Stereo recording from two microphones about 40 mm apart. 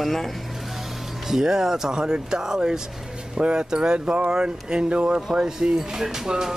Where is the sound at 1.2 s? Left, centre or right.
Centre.